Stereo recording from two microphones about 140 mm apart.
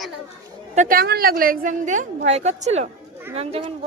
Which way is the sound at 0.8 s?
90° right.